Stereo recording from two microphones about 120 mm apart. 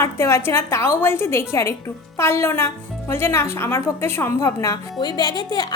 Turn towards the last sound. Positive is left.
turn(degrees=35)  # may be behind; listen again after turning